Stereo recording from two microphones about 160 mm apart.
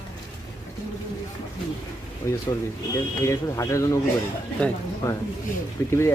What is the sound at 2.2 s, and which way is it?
Speech, 15° left (ahead or behind).